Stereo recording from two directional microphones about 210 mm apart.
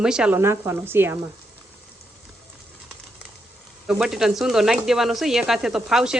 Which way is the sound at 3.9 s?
5° right (ahead or behind).